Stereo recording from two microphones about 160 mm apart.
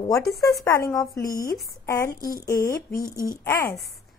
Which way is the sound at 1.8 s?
20° left (ahead or behind).